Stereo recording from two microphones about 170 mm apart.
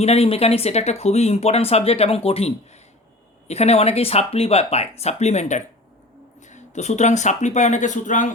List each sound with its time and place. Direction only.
0.0 s speech: 35° left (ahead or behind)